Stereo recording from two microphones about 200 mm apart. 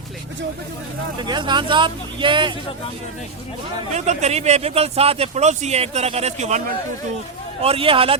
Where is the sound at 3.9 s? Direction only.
35° right (ahead or behind).